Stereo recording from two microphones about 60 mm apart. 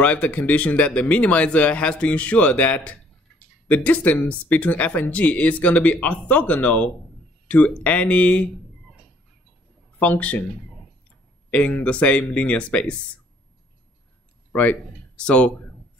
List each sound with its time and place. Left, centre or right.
0.0 s speech: left
9.9 s speech: left
11.5 s speech: left
14.5 s speech: left
15.1 s speech: centre